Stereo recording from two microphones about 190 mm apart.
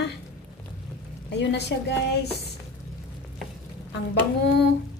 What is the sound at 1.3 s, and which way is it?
Speech, 65° left (ahead or behind).